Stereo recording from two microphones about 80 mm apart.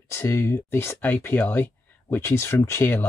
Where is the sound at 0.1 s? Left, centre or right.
Left.